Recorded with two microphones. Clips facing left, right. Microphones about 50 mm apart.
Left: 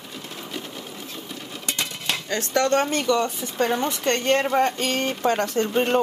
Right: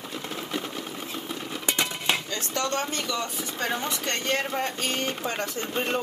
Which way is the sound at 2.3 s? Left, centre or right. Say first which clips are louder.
Left 7 dB; left.